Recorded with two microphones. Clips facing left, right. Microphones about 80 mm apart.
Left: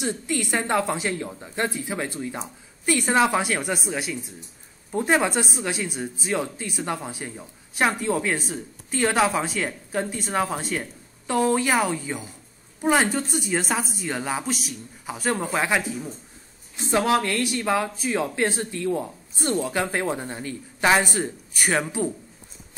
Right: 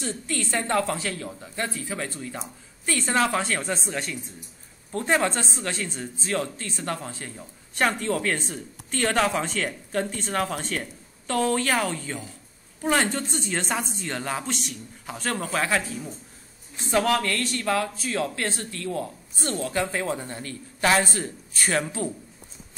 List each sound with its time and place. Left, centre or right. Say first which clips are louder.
0.0 s a woman's voice: left 4 dB; centre